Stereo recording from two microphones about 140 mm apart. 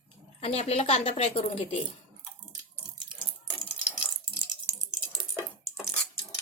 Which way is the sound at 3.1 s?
5° right (ahead or behind).